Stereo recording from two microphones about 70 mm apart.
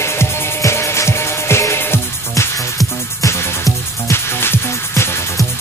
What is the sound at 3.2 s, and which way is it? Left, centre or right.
Music, left.